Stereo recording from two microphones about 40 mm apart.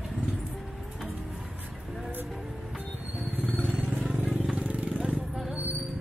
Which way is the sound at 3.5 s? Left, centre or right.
Right.